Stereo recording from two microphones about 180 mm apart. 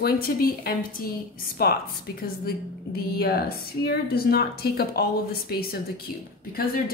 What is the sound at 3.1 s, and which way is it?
Speech, 60° left (ahead or behind).